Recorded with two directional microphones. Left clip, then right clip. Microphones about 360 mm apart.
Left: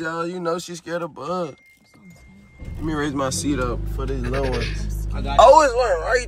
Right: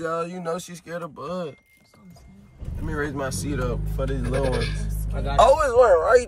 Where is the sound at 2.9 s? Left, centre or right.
Centre.